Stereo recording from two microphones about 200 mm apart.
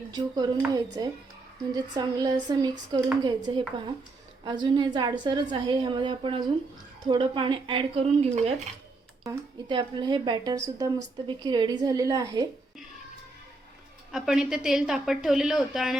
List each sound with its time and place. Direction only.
0.1 s speech: 20° right (ahead or behind)
9.2 s speech: 20° right (ahead or behind)
14.1 s a woman's voice: 5° right (ahead or behind)